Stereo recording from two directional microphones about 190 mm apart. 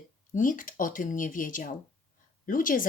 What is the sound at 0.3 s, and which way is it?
A woman's voice, 45° left (ahead or behind).